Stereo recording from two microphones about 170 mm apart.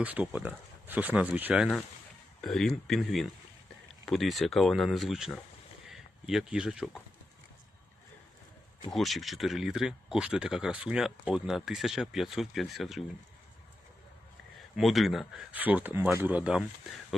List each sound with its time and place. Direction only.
0.0 s speech: 5° right (ahead or behind)
8.9 s speech: centre (ahead or behind)
14.8 s speech: centre (ahead or behind)